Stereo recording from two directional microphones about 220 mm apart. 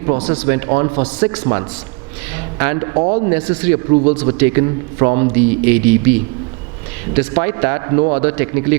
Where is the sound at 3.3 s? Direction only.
10° right (ahead or behind).